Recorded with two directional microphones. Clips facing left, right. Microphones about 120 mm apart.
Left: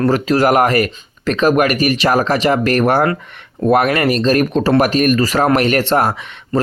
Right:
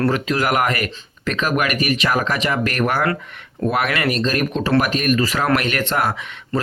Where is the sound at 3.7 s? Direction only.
45° left (ahead or behind).